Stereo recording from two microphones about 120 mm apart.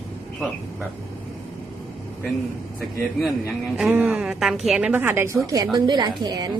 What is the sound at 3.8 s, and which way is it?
Speech, 10° right (ahead or behind).